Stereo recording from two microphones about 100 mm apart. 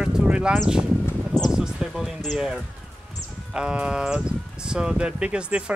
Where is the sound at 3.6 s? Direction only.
10° right (ahead or behind).